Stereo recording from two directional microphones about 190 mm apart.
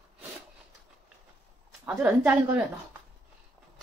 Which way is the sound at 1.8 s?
10° right (ahead or behind).